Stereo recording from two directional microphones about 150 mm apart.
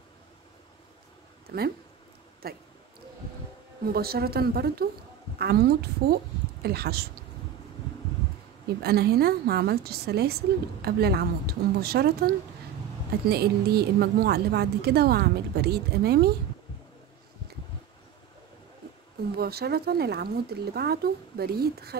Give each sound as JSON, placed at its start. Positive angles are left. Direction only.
{"t": 1.5, "sound": "a woman's voice", "side_deg": -90}
{"t": 3.8, "sound": "a woman's voice", "side_deg": -90}
{"t": 8.6, "sound": "a woman's voice", "side_deg": -90}
{"t": 19.3, "sound": "a woman's voice", "side_deg": -90}